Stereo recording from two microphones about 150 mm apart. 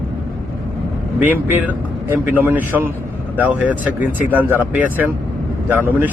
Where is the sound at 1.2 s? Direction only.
10° right (ahead or behind).